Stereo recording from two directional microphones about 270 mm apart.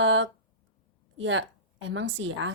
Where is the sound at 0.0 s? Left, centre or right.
Right.